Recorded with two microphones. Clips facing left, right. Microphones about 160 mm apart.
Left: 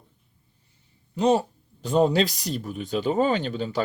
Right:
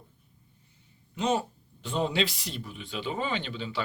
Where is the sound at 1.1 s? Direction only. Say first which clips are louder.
Left 7 dB; 35° left (ahead or behind).